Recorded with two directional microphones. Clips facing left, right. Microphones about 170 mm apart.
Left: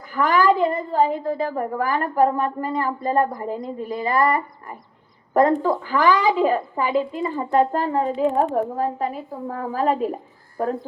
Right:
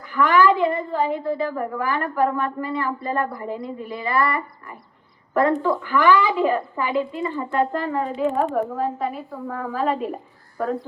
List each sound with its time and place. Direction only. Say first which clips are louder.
0.1 s a woman's voice: right 1 dB; 45° left (ahead or behind)